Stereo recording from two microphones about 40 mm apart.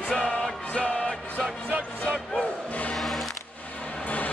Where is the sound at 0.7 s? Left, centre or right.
Left.